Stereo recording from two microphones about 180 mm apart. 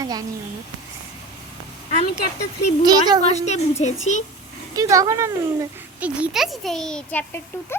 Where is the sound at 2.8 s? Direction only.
20° right (ahead or behind).